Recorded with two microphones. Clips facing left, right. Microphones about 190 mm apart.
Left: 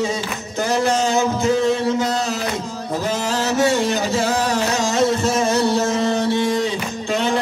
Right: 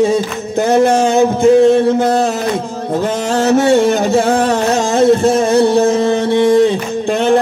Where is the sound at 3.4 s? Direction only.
55° right (ahead or behind).